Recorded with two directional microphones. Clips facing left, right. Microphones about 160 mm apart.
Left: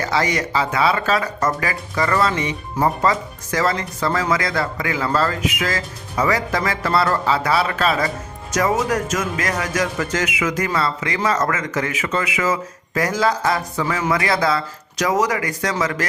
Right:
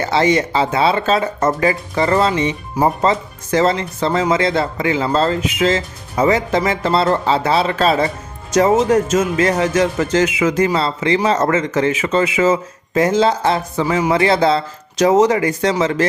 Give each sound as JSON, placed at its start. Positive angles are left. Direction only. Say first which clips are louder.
{"t": 0.0, "sound": "speech", "louder": "right 6 dB", "side_deg": -25}